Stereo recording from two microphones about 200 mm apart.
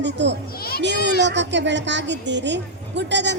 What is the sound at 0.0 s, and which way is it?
A woman's voice, 60° right (ahead or behind).